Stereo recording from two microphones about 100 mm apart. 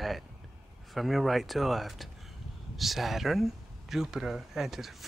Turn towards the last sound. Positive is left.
turn(degrees=0)  # may be behind; listen again after turning